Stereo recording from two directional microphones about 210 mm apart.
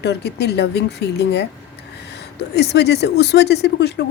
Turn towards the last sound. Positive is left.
turn(degrees=50)  # may be behind; listen again after turning